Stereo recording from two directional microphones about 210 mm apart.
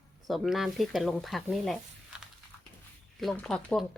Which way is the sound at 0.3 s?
Centre (ahead or behind).